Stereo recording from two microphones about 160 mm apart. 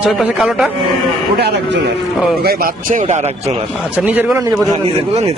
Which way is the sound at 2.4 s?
65° right (ahead or behind).